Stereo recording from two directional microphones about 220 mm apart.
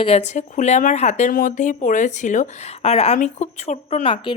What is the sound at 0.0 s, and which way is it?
Speech, 30° left (ahead or behind).